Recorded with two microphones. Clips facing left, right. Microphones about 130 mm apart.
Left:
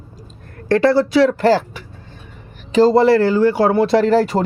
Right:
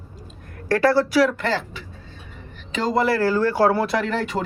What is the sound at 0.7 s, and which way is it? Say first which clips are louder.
Speech: left 4 dB; 20° left (ahead or behind).